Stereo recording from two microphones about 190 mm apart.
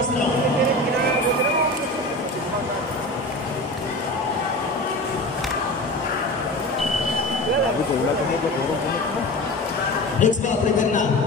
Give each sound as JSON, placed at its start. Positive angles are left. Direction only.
{"t": 10.2, "sound": "speech", "side_deg": 40}